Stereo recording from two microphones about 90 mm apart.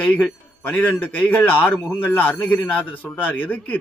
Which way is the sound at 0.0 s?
15° left (ahead or behind).